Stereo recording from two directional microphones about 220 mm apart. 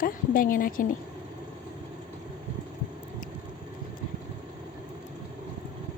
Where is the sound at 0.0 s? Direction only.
40° left (ahead or behind).